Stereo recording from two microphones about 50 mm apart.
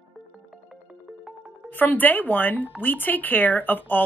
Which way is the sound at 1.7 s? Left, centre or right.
Left.